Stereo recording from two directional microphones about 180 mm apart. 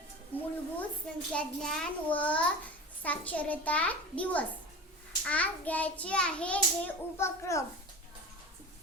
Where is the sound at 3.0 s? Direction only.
10° left (ahead or behind).